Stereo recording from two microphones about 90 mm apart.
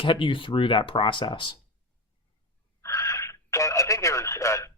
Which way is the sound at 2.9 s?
35° left (ahead or behind).